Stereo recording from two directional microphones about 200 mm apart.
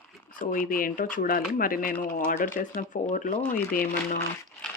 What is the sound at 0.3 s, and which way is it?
Speech, 45° left (ahead or behind).